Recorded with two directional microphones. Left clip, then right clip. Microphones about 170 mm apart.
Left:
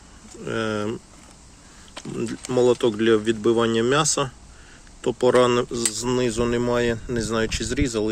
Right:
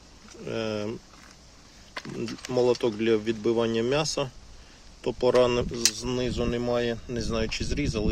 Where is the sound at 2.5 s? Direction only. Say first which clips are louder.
Left 5 dB; 5° right (ahead or behind).